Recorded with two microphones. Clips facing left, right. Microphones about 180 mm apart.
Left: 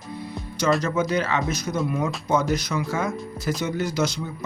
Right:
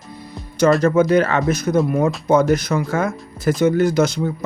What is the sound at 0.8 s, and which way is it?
Speech, 50° right (ahead or behind).